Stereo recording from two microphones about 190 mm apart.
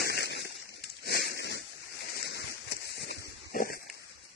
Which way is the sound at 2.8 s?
65° left (ahead or behind).